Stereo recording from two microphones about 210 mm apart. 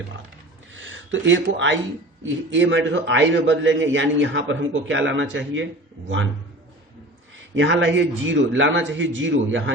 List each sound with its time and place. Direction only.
0.8 s a man's voice: 65° right (ahead or behind)
7.5 s a man's voice: 60° right (ahead or behind)